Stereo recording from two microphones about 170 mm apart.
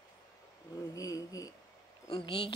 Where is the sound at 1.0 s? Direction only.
20° left (ahead or behind).